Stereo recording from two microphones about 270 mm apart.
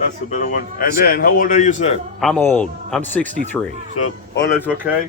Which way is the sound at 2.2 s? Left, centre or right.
Centre.